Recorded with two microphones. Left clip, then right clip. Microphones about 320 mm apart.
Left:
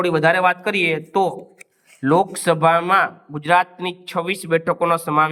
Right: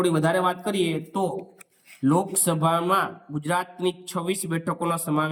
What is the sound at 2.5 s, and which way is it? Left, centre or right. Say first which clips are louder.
Speech: left 8 dB; centre.